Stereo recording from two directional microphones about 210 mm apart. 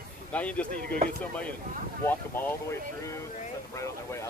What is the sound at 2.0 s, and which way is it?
Speech, 10° left (ahead or behind).